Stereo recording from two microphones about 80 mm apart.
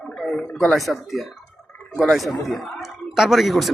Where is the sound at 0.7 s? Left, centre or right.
Centre.